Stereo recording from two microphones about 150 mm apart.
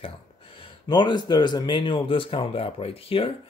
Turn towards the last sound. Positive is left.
turn(degrees=40)  # may be behind; listen again after turning